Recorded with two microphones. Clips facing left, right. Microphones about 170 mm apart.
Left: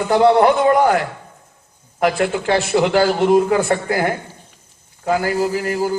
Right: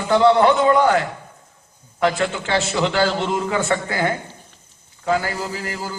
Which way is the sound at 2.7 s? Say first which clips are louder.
Left 6 dB; 45° left (ahead or behind).